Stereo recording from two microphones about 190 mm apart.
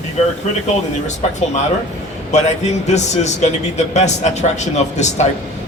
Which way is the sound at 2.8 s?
35° left (ahead or behind).